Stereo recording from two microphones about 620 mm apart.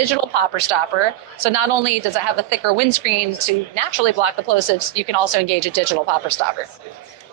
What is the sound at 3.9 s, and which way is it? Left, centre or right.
A woman's voice, right.